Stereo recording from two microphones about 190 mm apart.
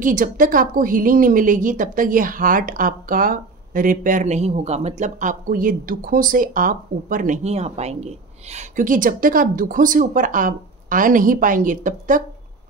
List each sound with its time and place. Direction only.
0.0 s a woman's voice: 45° right (ahead or behind)